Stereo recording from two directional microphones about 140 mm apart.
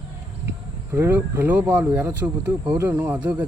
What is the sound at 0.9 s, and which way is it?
Speech, 15° right (ahead or behind).